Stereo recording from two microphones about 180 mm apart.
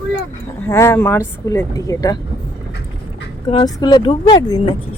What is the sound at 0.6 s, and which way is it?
Speech, 15° left (ahead or behind).